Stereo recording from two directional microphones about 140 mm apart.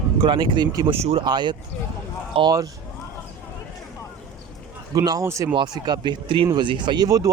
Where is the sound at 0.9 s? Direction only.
45° right (ahead or behind).